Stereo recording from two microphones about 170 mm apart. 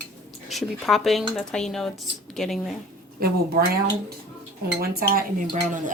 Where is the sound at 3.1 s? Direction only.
65° right (ahead or behind).